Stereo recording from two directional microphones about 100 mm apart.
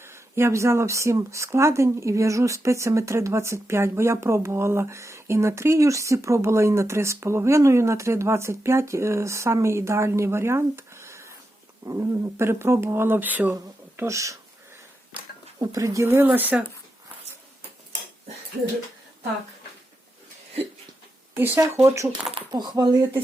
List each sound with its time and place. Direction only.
0.0 s speech: 25° right (ahead or behind)
13.9 s speech: 25° right (ahead or behind)
15.5 s speech: 35° right (ahead or behind); by 16.6 s 15° right (ahead or behind)
21.3 s speech: 20° right (ahead or behind)
22.5 s speech: 45° right (ahead or behind)